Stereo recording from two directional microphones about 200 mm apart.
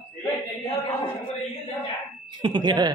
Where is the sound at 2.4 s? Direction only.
20° right (ahead or behind).